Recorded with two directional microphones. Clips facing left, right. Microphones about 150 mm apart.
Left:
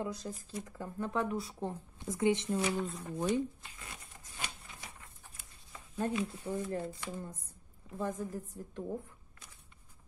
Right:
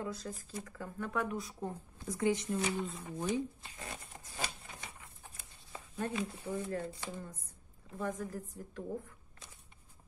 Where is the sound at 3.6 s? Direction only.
35° right (ahead or behind).